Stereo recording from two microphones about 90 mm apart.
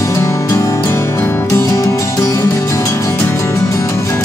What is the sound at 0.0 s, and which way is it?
Music, 35° left (ahead or behind).